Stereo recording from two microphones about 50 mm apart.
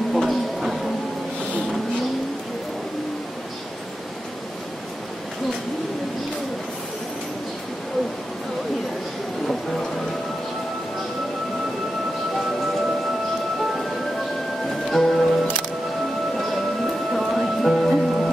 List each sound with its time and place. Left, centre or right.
0.1 s a sound: centre
14.9 s music: centre
16.3 s music: centre